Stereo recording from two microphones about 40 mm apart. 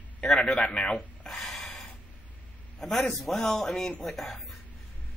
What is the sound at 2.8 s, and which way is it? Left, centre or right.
A man's voice, centre.